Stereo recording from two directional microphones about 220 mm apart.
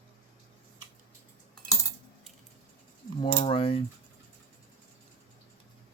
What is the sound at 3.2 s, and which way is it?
Speech, 25° left (ahead or behind).